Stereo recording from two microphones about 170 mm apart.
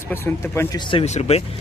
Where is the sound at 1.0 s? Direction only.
40° left (ahead or behind).